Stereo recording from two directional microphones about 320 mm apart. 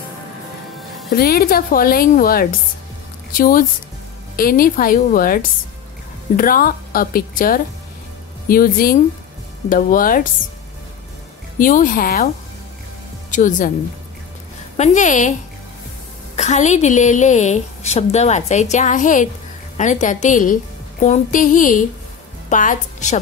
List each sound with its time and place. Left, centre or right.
1.1 s a woman's voice: left
11.5 s a woman's voice: left
13.3 s speech: left
14.8 s a woman's voice: left
16.3 s a woman's voice: left